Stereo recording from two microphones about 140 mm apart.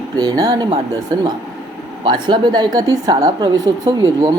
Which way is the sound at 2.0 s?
35° right (ahead or behind).